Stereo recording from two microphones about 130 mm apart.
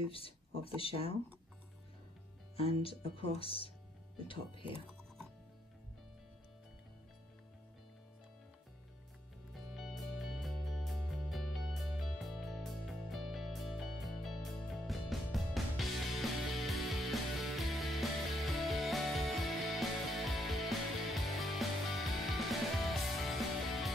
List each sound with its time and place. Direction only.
0.7 s speech: 45° left (ahead or behind)
2.5 s speech: 45° left (ahead or behind)
9.5 s music: centre (ahead or behind)